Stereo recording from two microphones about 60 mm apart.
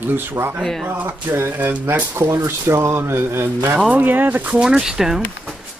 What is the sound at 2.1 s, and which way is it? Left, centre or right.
Speech, right.